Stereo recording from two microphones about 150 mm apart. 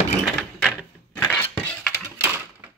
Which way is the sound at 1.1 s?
10° left (ahead or behind).